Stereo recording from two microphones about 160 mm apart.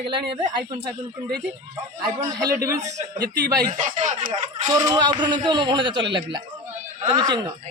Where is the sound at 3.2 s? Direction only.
90° right.